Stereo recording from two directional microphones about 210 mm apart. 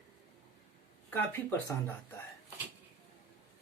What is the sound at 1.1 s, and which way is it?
Speech, 10° left (ahead or behind).